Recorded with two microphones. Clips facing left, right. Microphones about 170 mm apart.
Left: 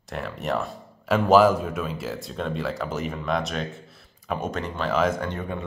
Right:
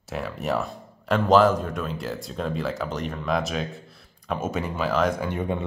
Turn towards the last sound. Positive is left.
turn(degrees=-20)  # may be behind; listen again after turning